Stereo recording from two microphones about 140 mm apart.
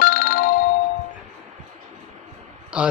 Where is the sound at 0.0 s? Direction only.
90° left.